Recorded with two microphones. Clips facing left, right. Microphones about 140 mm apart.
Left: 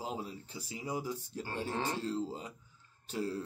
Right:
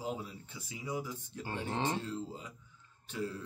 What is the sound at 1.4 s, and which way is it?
Speech, 20° right (ahead or behind).